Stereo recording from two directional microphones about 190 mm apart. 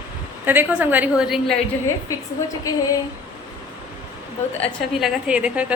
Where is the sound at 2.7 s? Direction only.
20° left (ahead or behind).